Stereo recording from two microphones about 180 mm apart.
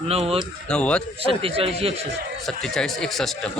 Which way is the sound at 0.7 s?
5° left (ahead or behind).